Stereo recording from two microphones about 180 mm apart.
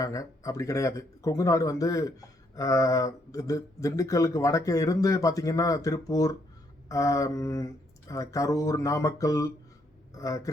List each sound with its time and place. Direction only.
0.0 s speech: 20° left (ahead or behind)